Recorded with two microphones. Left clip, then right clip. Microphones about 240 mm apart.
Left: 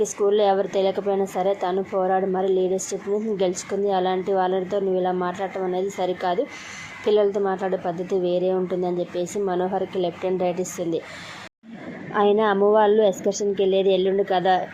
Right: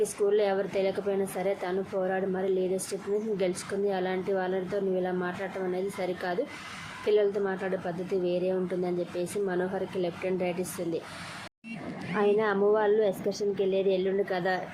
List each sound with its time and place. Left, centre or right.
0.0 s a woman's voice: centre
12.1 s a woman's voice: centre